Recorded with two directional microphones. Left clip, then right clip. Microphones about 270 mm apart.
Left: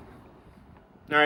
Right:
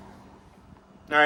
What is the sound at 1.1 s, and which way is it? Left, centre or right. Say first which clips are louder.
Speech: right 2 dB; centre.